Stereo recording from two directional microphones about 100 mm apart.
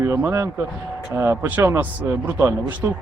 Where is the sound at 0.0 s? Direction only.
20° right (ahead or behind).